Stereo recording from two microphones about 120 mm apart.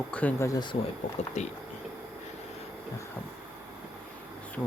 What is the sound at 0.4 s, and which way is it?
Speech, 35° left (ahead or behind).